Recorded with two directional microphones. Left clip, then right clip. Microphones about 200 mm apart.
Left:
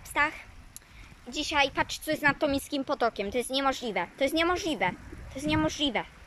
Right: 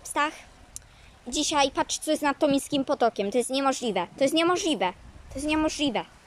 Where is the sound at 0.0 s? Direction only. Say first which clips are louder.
Right 1 dB; 10° right (ahead or behind).